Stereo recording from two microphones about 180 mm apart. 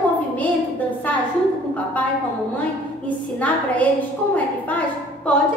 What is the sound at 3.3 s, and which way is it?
A woman's voice, 10° left (ahead or behind).